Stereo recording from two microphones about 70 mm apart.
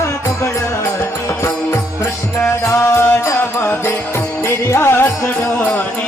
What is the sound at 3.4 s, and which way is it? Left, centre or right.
Music, left.